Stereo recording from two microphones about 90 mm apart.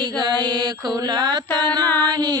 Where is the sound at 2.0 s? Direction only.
50° right (ahead or behind).